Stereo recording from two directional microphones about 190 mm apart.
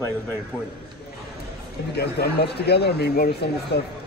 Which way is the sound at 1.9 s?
60° left (ahead or behind).